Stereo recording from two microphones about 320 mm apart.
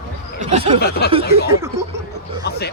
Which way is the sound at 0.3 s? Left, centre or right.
Right.